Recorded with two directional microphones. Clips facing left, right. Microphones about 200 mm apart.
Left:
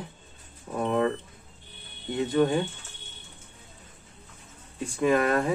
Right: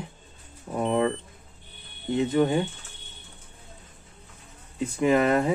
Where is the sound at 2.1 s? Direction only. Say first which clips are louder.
Right 1 dB; 20° right (ahead or behind).